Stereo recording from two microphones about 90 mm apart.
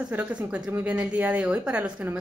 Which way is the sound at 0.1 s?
15° right (ahead or behind).